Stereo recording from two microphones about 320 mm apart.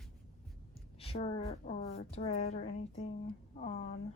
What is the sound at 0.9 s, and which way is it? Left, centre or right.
A woman's voice, centre.